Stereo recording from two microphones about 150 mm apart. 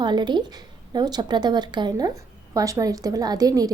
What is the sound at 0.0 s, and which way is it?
A woman's voice, 30° right (ahead or behind).